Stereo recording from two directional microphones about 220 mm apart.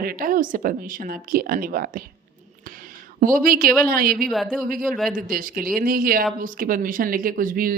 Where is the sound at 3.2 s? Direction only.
40° right (ahead or behind).